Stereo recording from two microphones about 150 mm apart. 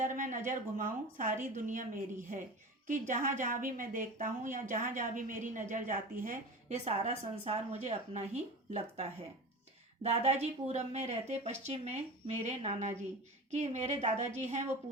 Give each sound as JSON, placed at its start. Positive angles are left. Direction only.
{"t": 0.0, "sound": "a woman's voice", "side_deg": -60}